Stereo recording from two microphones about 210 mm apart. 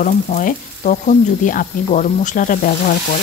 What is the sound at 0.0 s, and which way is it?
Frying, 40° left (ahead or behind).